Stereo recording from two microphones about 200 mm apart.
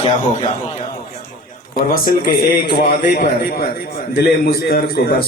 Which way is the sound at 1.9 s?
45° left (ahead or behind).